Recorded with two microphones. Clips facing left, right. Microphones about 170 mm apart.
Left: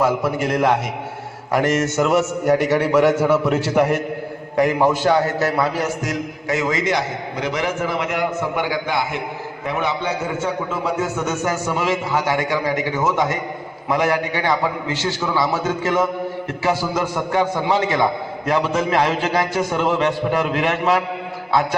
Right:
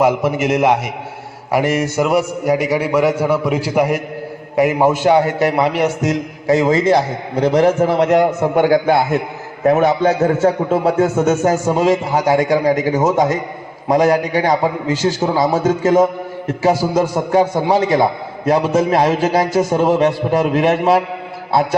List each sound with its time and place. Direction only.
0.0 s a man's voice: 20° right (ahead or behind); by 8.0 s 35° right (ahead or behind)
8.5 s a man's voice: 55° right (ahead or behind)
9.6 s a man's voice: 45° right (ahead or behind)
10.8 s a man's voice: 50° right (ahead or behind)
13.1 s a man's voice: 30° right (ahead or behind); by 16.0 s 45° right (ahead or behind)
16.8 s a man's voice: 30° right (ahead or behind)